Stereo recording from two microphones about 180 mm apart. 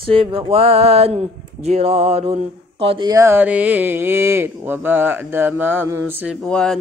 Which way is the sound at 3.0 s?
15° right (ahead or behind).